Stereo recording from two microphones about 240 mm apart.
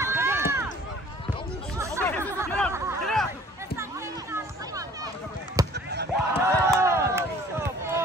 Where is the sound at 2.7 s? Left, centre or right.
Centre.